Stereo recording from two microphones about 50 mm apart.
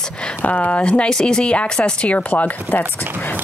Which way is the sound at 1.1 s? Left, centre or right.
Centre.